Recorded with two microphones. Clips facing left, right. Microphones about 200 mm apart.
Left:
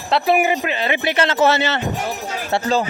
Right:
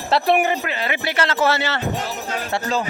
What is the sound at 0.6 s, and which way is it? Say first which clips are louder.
A man's voice: left 4 dB; 20° left (ahead or behind).